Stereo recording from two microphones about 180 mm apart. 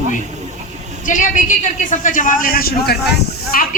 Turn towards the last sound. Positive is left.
turn(degrees=55)  # may be behind; listen again after turning